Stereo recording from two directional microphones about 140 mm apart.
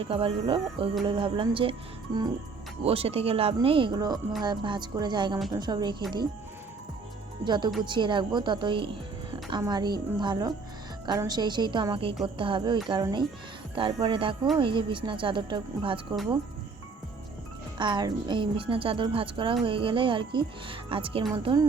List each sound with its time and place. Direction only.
0.0 s speech: 40° right (ahead or behind)
2.8 s speech: 45° right (ahead or behind)
7.4 s a woman's voice: 30° right (ahead or behind)
17.7 s speech: 35° right (ahead or behind)